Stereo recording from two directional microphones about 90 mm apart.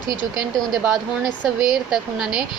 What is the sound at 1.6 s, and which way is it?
Speech, 5° right (ahead or behind).